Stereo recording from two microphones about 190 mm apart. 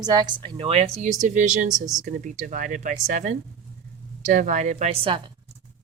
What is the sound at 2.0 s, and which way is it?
Speech, 45° right (ahead or behind).